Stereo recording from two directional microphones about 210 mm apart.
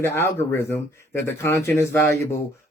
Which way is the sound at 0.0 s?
10° left (ahead or behind).